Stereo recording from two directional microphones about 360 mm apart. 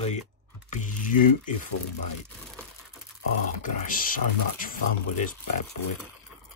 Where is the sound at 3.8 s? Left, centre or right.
Left.